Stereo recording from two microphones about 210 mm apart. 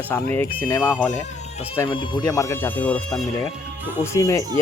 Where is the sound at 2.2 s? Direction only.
15° left (ahead or behind).